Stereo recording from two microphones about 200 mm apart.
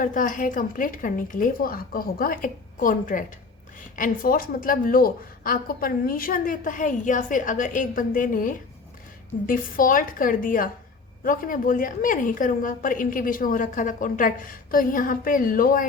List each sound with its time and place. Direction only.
0.0 s a woman's voice: 40° left (ahead or behind)